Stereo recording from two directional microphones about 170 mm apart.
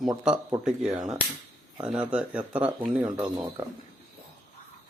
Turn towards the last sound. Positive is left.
turn(degrees=-20)  # may be behind; listen again after turning